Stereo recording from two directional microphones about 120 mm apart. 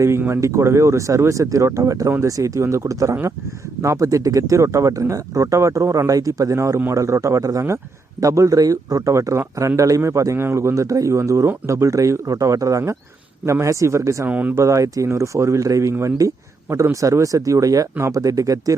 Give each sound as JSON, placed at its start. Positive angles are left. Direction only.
{"t": 0.0, "sound": "speech", "side_deg": -20}
{"t": 14.3, "sound": "speech", "side_deg": -15}
{"t": 14.6, "sound": "speech", "side_deg": -25}